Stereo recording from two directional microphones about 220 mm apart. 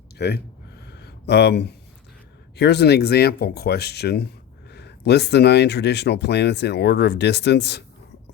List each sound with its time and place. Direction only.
0.2 s speech: 50° left (ahead or behind)
0.9 s a sound: 50° left (ahead or behind)
2.6 s speech: 50° left (ahead or behind)